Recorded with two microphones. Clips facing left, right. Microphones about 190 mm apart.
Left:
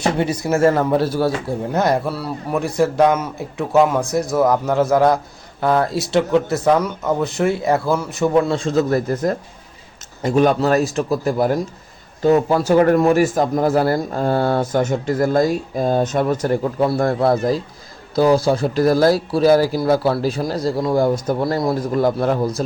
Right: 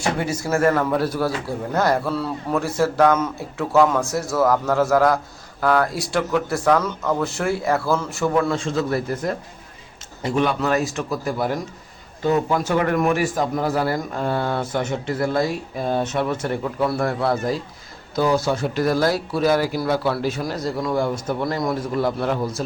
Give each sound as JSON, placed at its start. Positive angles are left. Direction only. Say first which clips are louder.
{"t": 0.2, "sound": "a man's voice", "louder": "left 5 dB", "side_deg": 20}
{"t": 8.5, "sound": "speech", "louder": "left 5 dB", "side_deg": 40}
{"t": 13.3, "sound": "speech", "louder": "left 5 dB", "side_deg": 45}